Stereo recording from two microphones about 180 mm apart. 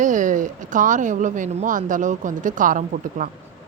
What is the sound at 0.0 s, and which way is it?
Speech, 45° right (ahead or behind).